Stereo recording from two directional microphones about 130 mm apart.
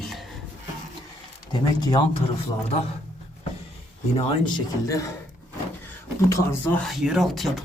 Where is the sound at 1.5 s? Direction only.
35° left (ahead or behind).